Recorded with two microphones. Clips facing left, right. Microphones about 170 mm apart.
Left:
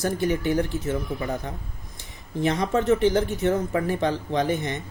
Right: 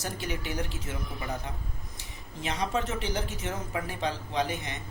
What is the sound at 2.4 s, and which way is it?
Speech, 55° left (ahead or behind).